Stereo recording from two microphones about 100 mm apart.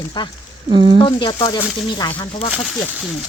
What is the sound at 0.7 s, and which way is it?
Speech, 55° right (ahead or behind).